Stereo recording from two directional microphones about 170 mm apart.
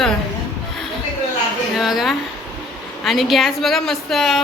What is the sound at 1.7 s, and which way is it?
A woman's voice, centre (ahead or behind).